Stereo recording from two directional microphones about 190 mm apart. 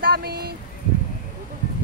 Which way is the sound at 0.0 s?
55° right (ahead or behind).